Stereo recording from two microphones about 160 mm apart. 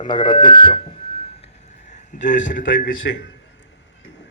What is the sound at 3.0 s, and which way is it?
Speech, 90° left.